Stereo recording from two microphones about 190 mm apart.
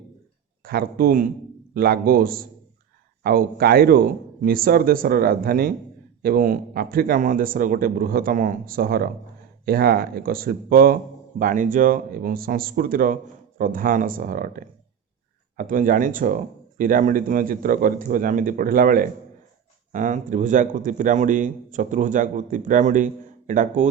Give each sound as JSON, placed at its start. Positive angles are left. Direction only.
{"t": 0.6, "sound": "a man's voice", "side_deg": -55}